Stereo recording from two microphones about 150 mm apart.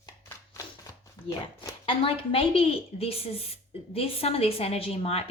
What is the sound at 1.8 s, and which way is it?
A woman's voice, 40° left (ahead or behind).